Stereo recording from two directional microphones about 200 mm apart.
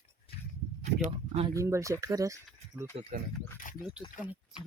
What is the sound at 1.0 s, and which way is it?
Speech, 30° right (ahead or behind).